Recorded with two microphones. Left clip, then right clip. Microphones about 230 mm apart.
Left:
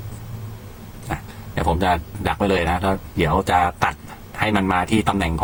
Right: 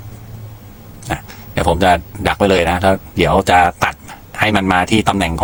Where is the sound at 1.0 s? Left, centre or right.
Right.